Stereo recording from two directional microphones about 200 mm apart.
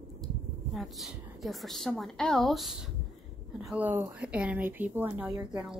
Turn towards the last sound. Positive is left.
turn(degrees=-15)  # may be behind; listen again after turning